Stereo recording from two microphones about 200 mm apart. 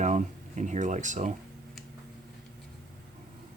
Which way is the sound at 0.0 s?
35° right (ahead or behind).